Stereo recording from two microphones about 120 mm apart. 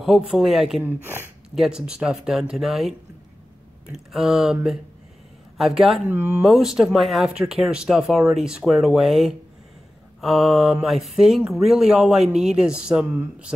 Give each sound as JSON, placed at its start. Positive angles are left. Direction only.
{"t": 0.0, "sound": "speech", "side_deg": 0}
{"t": 1.0, "sound": "speech", "side_deg": -20}
{"t": 1.5, "sound": "speech", "side_deg": -5}
{"t": 5.6, "sound": "speech", "side_deg": 0}
{"t": 6.0, "sound": "speech", "side_deg": -20}
{"t": 6.4, "sound": "speech", "side_deg": -5}